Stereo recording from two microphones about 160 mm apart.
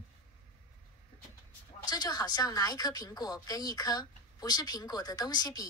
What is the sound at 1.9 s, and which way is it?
Speech, 25° left (ahead or behind).